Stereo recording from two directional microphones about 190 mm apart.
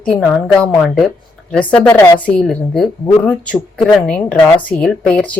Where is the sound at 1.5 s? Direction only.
5° left (ahead or behind).